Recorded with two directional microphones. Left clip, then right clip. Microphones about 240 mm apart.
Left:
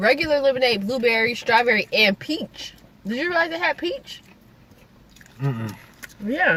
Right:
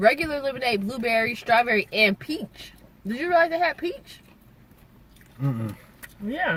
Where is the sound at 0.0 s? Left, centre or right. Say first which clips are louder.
Left 3 dB; centre.